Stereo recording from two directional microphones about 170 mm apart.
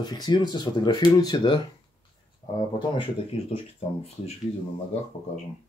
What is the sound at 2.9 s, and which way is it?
Speech, 35° left (ahead or behind).